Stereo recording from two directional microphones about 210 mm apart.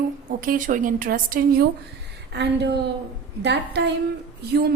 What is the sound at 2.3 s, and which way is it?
A woman's voice, 55° right (ahead or behind).